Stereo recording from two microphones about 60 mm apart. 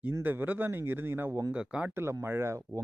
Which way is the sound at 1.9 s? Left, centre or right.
Right.